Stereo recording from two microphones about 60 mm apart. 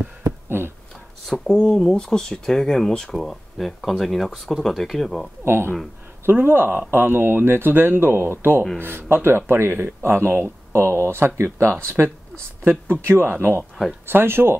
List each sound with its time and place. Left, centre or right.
0.2 s a sound: right
1.2 s speech: centre
5.4 s speech: right